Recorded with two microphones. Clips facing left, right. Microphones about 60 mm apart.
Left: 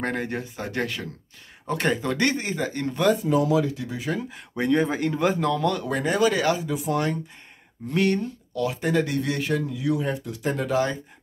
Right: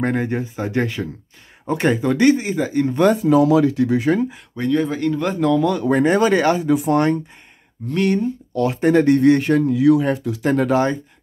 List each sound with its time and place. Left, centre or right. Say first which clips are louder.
0.0 s speech: right 7 dB; centre
2.9 s speech: right 5 dB; right
3.3 s speech: right 7 dB; right
4.6 s speech: right 3 dB; left
5.3 s speech: right 6 dB; centre
5.9 s speech: right 8 dB; right
8.5 s speech: right 8 dB; right
9.8 s speech: right 10 dB; right